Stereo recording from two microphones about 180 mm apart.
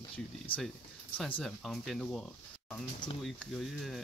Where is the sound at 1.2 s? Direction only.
5° left (ahead or behind).